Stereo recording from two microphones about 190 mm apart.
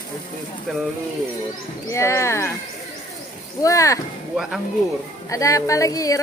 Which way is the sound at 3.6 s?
15° left (ahead or behind).